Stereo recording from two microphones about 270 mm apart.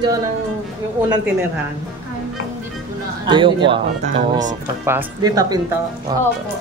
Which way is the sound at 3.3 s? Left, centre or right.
Centre.